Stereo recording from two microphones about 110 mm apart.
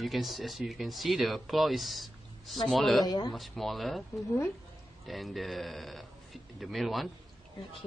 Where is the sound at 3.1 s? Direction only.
40° left (ahead or behind).